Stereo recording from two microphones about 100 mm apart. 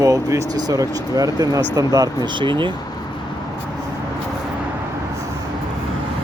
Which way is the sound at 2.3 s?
55° right (ahead or behind).